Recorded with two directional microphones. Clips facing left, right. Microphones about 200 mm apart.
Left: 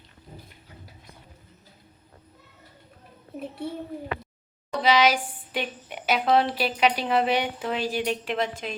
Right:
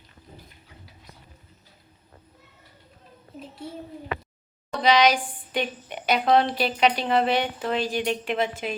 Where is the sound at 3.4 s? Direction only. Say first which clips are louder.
Left 6 dB; 60° left (ahead or behind).